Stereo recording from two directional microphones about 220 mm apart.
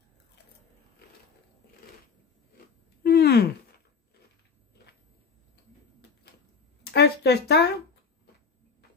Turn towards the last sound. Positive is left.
turn(degrees=50)  # may be behind; listen again after turning